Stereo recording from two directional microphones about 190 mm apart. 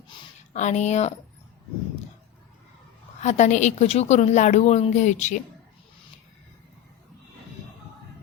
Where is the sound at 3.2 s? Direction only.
40° left (ahead or behind).